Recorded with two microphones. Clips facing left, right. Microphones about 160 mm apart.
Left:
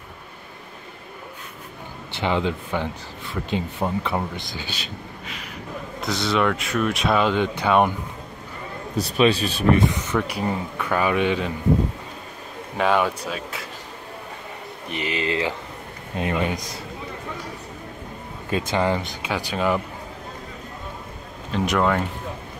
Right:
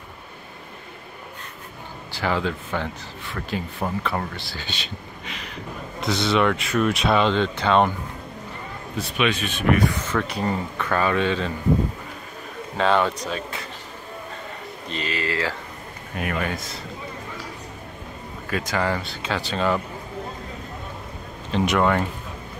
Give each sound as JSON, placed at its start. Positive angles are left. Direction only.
{"t": 2.1, "sound": "speech", "side_deg": 20}
{"t": 6.0, "sound": "speech", "side_deg": 0}
{"t": 8.9, "sound": "speech", "side_deg": 35}
{"t": 9.8, "sound": "speech", "side_deg": 15}
{"t": 12.7, "sound": "speech", "side_deg": 10}
{"t": 14.9, "sound": "speech", "side_deg": 15}
{"t": 18.5, "sound": "speech", "side_deg": 25}
{"t": 21.5, "sound": "speech", "side_deg": 0}